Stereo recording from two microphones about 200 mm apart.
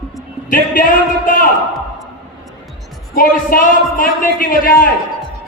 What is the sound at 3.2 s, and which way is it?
A man's voice, 45° left (ahead or behind).